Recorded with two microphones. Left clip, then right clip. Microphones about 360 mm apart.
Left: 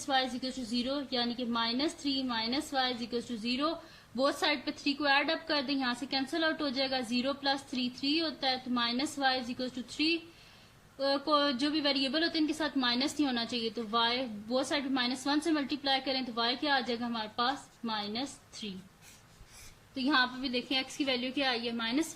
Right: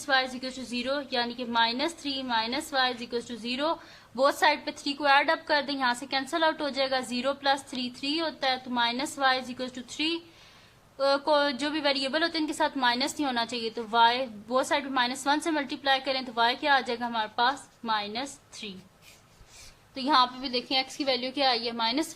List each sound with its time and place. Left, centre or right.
0.1 s a woman's voice: right
20.0 s a woman's voice: right